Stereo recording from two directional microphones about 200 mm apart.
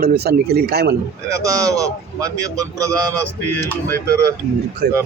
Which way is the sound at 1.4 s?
15° right (ahead or behind).